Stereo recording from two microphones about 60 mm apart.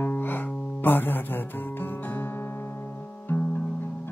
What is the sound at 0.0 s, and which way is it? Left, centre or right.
Music, left.